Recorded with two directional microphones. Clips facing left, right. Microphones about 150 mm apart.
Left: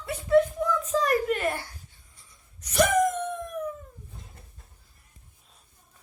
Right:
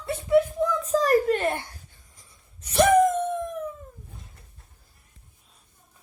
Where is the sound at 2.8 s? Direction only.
30° right (ahead or behind).